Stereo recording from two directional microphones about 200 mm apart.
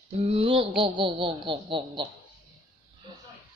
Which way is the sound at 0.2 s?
25° right (ahead or behind).